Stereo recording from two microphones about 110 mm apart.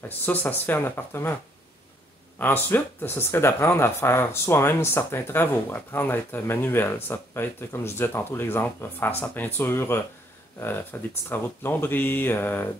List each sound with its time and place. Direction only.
0.2 s speech: 15° left (ahead or behind)
2.3 s speech: 20° left (ahead or behind)